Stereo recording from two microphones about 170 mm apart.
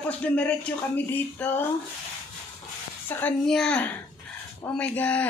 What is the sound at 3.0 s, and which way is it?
Speech, 5° left (ahead or behind).